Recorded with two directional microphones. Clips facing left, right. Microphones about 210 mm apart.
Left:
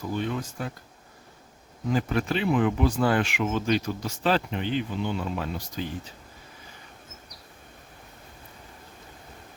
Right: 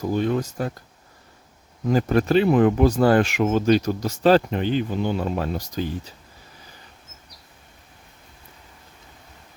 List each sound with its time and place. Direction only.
0.0 s speech: 40° right (ahead or behind)
1.9 s speech: 40° right (ahead or behind)